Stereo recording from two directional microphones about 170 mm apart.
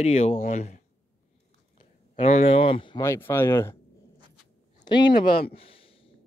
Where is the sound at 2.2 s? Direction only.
40° left (ahead or behind).